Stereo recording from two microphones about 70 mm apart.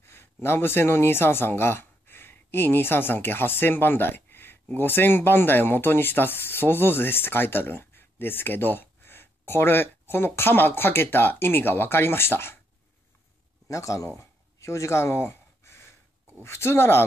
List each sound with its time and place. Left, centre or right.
0.0 s speech: left
13.7 s a sound: left
16.4 s speech: left